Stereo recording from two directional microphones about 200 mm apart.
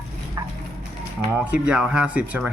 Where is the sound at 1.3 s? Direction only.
5° right (ahead or behind).